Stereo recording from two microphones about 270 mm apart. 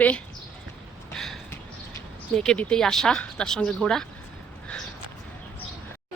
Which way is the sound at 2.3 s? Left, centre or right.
Centre.